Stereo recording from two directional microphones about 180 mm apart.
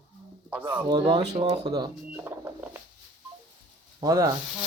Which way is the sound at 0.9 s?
25° right (ahead or behind).